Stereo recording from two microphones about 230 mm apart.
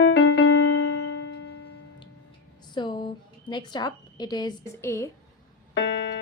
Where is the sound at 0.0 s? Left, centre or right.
Left.